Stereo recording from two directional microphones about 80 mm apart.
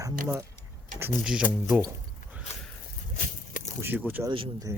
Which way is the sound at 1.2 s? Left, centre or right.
Centre.